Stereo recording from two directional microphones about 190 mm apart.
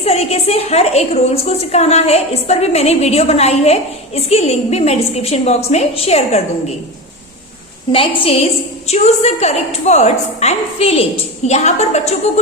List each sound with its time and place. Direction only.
0.0 s a woman's voice: 35° left (ahead or behind)
7.9 s a woman's voice: 30° left (ahead or behind)